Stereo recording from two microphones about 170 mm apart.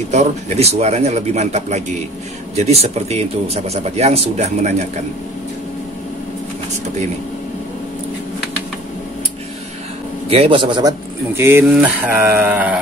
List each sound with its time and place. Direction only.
0.1 s speech: 40° right (ahead or behind)
10.3 s speech: 35° right (ahead or behind); by 12.7 s 10° right (ahead or behind)